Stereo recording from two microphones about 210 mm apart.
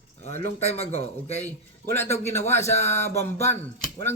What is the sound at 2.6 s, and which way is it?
Speech, 30° left (ahead or behind).